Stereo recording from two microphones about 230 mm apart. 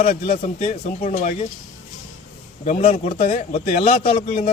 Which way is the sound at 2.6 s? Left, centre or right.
Left.